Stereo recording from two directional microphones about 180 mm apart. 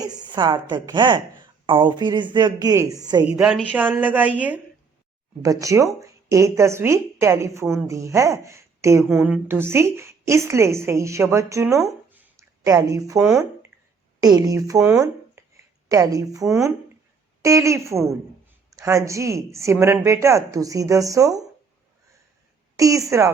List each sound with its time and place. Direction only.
0.0 s speech: 20° right (ahead or behind)
3.2 s a woman's voice: 5° right (ahead or behind)
14.2 s speech: 20° right (ahead or behind)
22.8 s speech: 20° right (ahead or behind)